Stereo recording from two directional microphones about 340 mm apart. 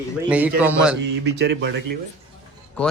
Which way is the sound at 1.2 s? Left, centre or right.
Right.